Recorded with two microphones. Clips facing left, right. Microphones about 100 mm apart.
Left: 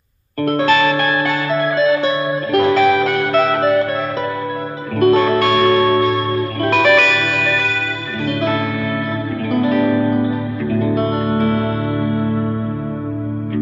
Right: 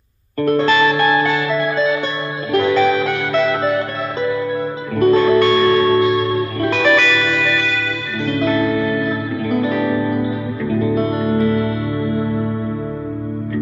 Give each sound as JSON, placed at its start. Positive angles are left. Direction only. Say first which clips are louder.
{"t": 0.5, "sound": "music", "louder": "even", "side_deg": 55}
{"t": 2.6, "sound": "music", "louder": "left 2 dB", "side_deg": 55}
{"t": 4.9, "sound": "music", "louder": "even", "side_deg": 45}
{"t": 5.4, "sound": "music", "louder": "even", "side_deg": 55}